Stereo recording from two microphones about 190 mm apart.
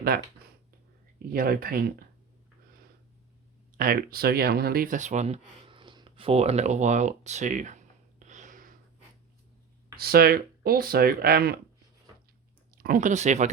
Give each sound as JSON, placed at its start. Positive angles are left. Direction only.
{"t": 1.3, "sound": "speech", "side_deg": -50}
{"t": 3.8, "sound": "speech", "side_deg": -50}
{"t": 8.3, "sound": "a sound", "side_deg": -40}
{"t": 10.0, "sound": "speech", "side_deg": -55}
{"t": 12.7, "sound": "speech", "side_deg": -45}